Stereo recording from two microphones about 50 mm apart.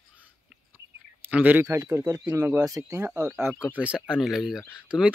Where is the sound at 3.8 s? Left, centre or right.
Right.